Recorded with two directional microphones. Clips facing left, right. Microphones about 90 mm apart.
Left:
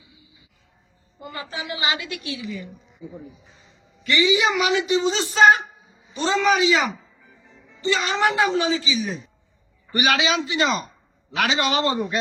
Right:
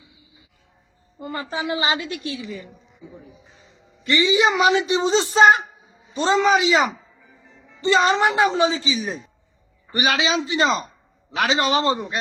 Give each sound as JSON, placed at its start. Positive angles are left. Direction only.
{"t": 1.2, "sound": "a woman's voice", "side_deg": -35}
{"t": 4.0, "sound": "a woman's voice", "side_deg": -30}